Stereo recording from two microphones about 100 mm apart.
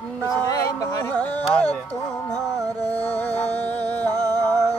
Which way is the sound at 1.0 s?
20° left (ahead or behind).